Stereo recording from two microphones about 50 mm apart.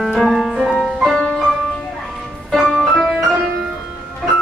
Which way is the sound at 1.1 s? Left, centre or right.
Centre.